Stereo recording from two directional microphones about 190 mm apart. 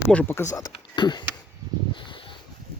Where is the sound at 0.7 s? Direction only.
25° left (ahead or behind).